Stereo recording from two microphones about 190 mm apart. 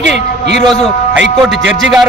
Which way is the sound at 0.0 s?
65° right (ahead or behind).